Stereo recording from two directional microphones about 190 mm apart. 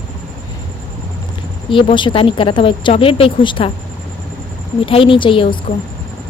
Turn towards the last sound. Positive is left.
turn(degrees=25)  # may be behind; listen again after turning